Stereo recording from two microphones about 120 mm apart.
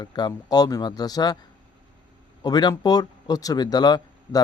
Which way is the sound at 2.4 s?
35° left (ahead or behind).